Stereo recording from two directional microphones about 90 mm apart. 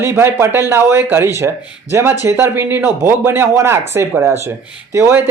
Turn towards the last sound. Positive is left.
turn(degrees=-30)  # may be behind; listen again after turning